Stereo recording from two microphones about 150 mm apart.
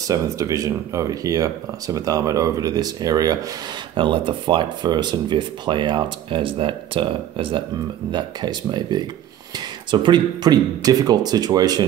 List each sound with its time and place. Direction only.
0.1 s speech: 20° right (ahead or behind)